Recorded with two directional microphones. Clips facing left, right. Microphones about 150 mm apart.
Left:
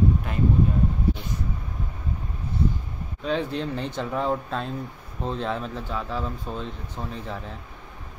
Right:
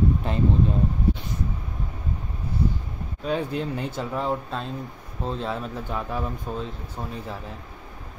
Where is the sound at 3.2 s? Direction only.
10° right (ahead or behind).